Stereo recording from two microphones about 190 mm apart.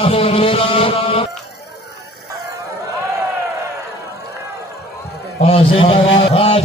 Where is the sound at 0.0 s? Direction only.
30° left (ahead or behind).